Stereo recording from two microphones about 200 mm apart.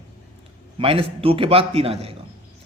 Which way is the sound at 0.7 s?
30° right (ahead or behind).